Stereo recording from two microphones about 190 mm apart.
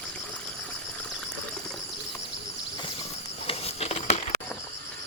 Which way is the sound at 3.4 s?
30° left (ahead or behind).